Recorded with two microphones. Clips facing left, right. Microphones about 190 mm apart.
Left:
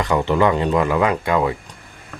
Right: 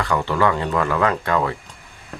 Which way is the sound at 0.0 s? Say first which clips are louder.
Left 3 dB; 20° left (ahead or behind).